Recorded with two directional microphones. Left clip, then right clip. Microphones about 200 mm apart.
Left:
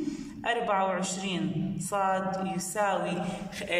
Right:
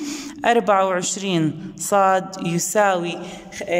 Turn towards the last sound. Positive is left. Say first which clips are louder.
# right 6 dB
turn(degrees=-35)  # may be behind; listen again after turning